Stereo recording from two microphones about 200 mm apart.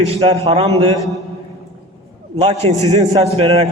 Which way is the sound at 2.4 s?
30° right (ahead or behind).